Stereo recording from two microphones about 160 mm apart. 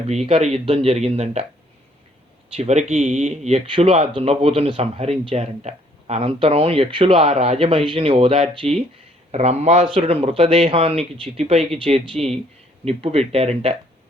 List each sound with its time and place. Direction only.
0.1 s speech: 40° right (ahead or behind)
2.6 s speech: 40° right (ahead or behind)